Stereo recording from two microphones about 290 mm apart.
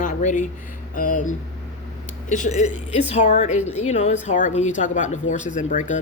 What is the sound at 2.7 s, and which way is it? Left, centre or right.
A woman's voice, left.